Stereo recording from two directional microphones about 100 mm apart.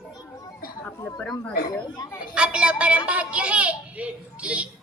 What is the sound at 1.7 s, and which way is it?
Speech, 30° left (ahead or behind).